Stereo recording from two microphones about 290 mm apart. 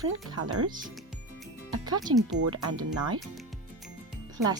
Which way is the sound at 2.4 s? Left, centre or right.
Right.